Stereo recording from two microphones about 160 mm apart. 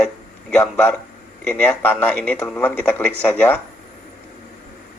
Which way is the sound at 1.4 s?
5° left (ahead or behind).